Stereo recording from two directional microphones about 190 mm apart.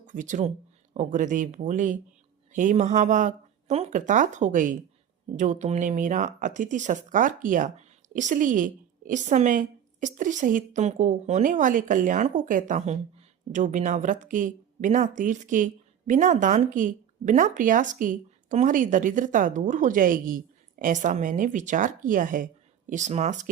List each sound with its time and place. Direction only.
0.0 s speech: 40° right (ahead or behind)